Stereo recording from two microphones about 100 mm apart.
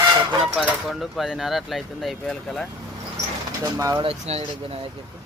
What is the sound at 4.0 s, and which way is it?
Speech, 80° right.